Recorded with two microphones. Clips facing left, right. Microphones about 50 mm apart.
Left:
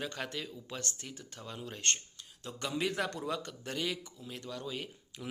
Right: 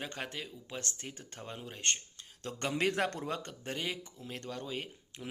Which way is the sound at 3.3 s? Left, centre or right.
Right.